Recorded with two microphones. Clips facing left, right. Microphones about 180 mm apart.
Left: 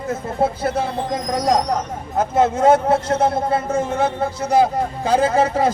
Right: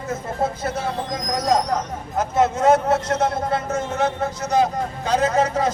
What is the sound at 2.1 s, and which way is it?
A man's voice, 30° left (ahead or behind).